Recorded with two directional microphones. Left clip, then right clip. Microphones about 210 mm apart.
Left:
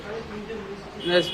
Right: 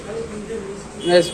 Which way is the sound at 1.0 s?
Centre (ahead or behind).